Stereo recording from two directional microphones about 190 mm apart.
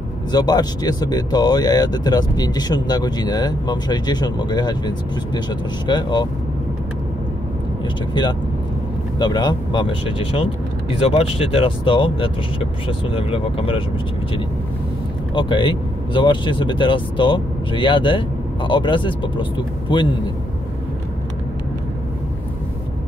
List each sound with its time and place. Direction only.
0.3 s speech: 20° left (ahead or behind)
8.1 s speech: 25° left (ahead or behind)
15.3 s speech: 25° left (ahead or behind)